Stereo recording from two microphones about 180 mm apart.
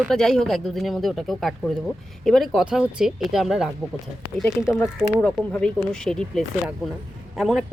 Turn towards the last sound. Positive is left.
turn(degrees=0)  # may be behind; listen again after turning